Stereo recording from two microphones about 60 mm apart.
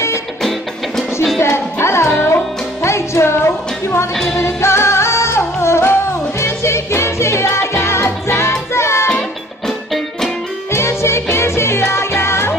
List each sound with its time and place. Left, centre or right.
0.4 s music: centre
1.4 s music: left
2.1 s music: left
2.8 s music: left
10.7 s music: left